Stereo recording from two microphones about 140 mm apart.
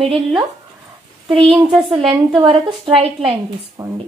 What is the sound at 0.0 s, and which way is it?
Speech, 35° right (ahead or behind).